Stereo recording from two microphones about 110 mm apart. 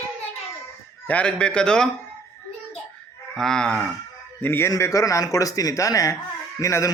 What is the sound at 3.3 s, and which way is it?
Cattle, 5° left (ahead or behind).